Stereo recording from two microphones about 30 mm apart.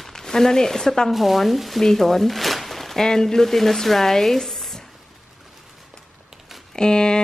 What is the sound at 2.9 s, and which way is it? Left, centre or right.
A woman's voice, centre.